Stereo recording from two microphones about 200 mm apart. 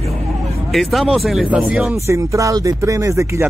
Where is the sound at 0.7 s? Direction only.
Centre (ahead or behind); by 3.5 s 15° right (ahead or behind).